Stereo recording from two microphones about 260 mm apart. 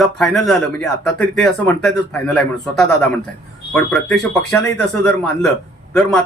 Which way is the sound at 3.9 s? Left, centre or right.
Centre.